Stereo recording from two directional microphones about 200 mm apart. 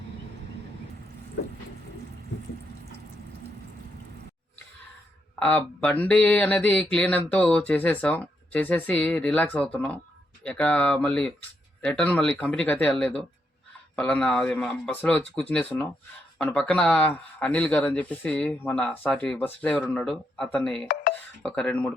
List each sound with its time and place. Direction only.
1.4 s a sound: 55° left (ahead or behind)
5.4 s a man's voice: 5° left (ahead or behind)
20.8 s speech: 60° left (ahead or behind)
21.4 s a man's voice: 5° left (ahead or behind)